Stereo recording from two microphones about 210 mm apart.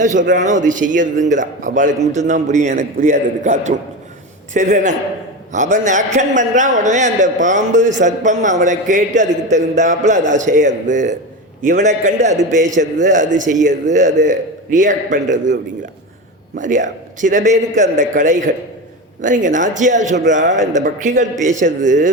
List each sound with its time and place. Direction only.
0.0 s a man's voice: 35° right (ahead or behind)
16.6 s a man's voice: 35° right (ahead or behind)